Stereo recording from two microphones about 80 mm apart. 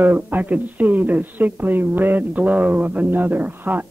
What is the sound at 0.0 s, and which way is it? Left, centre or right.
A woman's voice, right.